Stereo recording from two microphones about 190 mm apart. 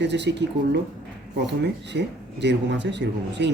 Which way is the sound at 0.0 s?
65° right (ahead or behind).